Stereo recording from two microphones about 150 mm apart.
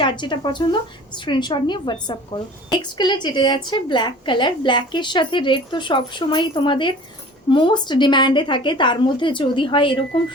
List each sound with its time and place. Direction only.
0.0 s a woman's voice: 30° left (ahead or behind)